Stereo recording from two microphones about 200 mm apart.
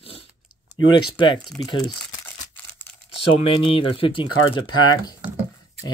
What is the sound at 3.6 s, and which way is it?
Speech, 25° left (ahead or behind).